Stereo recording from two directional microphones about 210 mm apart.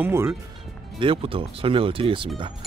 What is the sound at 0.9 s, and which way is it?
Speech, 25° right (ahead or behind).